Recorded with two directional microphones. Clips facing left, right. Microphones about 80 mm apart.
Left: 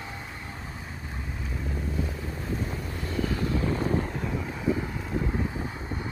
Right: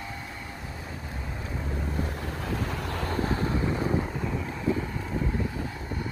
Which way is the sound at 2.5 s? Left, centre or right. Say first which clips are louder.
Right 1 dB; right.